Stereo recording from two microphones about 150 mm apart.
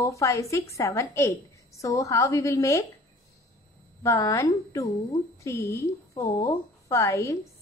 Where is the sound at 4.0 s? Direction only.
20° left (ahead or behind).